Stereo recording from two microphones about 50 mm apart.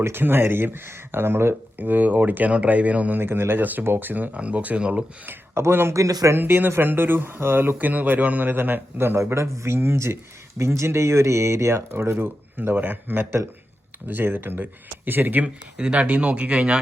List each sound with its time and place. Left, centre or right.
0.0 s a man's voice: right
1.8 s speech: right
3.2 s a man's voice: right
3.6 s speech: right
5.5 s speech: right
5.9 s a man's voice: right
6.3 s a man's voice: right
7.8 s a man's voice: right
10.6 s speech: right
15.4 s speech: right